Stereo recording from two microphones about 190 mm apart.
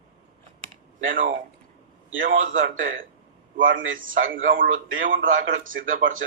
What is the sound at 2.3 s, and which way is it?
A man's voice, 90° right.